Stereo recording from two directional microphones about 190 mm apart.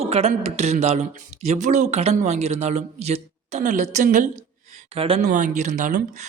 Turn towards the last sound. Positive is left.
turn(degrees=-40)  # may be behind; listen again after turning